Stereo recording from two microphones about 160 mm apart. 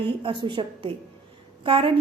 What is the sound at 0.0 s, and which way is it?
A woman's voice, 30° right (ahead or behind).